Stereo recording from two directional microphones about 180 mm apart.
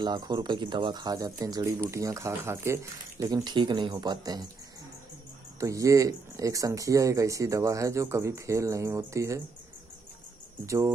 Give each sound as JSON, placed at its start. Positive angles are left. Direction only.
{"t": 0.0, "sound": "speech", "side_deg": -25}
{"t": 5.6, "sound": "speech", "side_deg": -15}
{"t": 10.6, "sound": "speech", "side_deg": -15}